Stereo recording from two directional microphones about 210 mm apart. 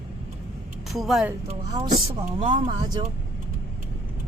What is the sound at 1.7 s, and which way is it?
Speech, 20° right (ahead or behind).